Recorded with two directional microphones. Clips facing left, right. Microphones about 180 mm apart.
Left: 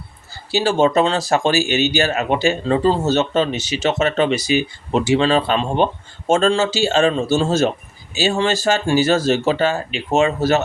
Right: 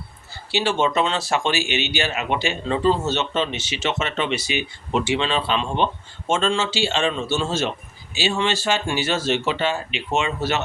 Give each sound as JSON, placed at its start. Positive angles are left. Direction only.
{"t": 0.5, "sound": "speech", "side_deg": 40}